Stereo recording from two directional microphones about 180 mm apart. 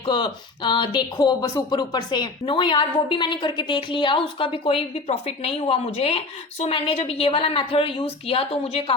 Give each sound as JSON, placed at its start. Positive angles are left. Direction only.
{"t": 0.0, "sound": "speech", "side_deg": 25}